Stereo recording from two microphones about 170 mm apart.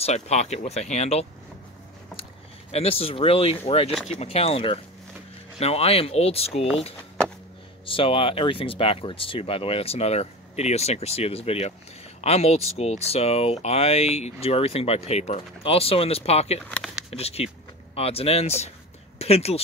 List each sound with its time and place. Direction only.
0.0 s speech: 40° left (ahead or behind)
2.7 s speech: 35° left (ahead or behind)
3.9 s speech: centre (ahead or behind)
4.2 s speech: 35° left (ahead or behind)
16.6 s speech: 5° left (ahead or behind)
17.1 s speech: 35° left (ahead or behind)